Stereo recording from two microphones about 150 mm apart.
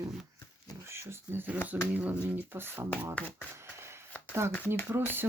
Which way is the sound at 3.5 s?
15° right (ahead or behind).